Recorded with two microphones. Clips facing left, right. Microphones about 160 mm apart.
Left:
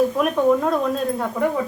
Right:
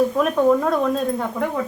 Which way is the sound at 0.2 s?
5° left (ahead or behind).